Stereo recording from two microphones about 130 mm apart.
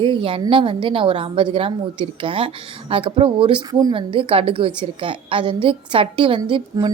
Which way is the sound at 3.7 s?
30° right (ahead or behind).